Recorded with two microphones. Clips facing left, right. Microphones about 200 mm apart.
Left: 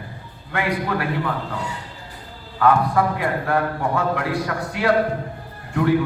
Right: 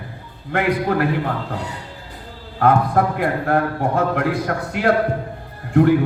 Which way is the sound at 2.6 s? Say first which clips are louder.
Right 1 dB; 50° right (ahead or behind).